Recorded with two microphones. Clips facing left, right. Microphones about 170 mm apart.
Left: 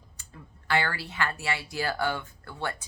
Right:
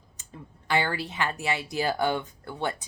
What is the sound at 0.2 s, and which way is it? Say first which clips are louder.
A woman's voice: right 5 dB; 20° right (ahead or behind).